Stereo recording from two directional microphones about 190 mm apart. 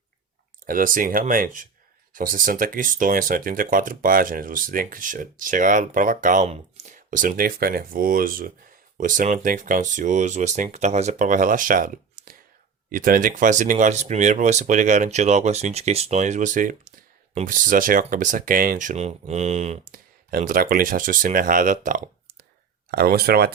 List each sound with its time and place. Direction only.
0.6 s speech: 45° right (ahead or behind)
22.9 s speech: 55° right (ahead or behind)